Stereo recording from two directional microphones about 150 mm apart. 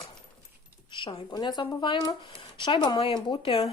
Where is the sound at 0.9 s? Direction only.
35° left (ahead or behind).